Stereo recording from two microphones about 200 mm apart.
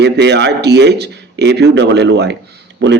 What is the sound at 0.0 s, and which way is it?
A man's voice, 60° right (ahead or behind).